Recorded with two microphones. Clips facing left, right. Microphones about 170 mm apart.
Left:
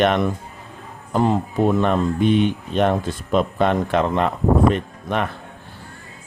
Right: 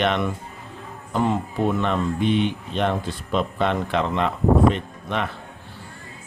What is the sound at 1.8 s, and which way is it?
Speech, 45° left (ahead or behind).